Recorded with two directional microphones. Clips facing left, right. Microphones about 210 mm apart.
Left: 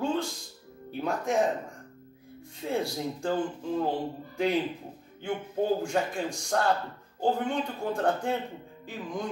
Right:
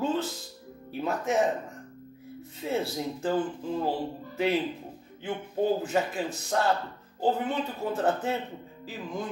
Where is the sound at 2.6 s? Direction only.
5° right (ahead or behind).